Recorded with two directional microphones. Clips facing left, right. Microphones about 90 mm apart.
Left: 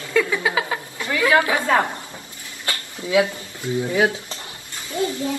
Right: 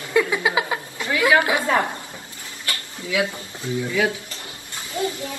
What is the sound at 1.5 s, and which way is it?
Speech, 20° right (ahead or behind).